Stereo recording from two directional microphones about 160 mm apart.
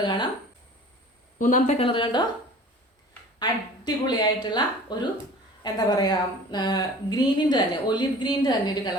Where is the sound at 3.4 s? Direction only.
25° left (ahead or behind).